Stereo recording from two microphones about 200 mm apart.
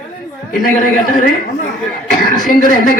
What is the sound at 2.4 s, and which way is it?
Speech, 45° left (ahead or behind).